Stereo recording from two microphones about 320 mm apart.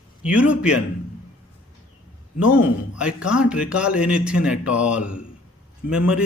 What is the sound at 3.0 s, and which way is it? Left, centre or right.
A man's voice, centre.